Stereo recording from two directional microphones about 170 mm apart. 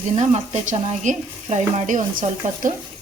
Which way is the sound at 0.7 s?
45° right (ahead or behind).